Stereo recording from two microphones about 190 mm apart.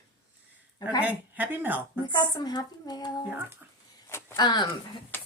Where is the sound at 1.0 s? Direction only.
10° right (ahead or behind).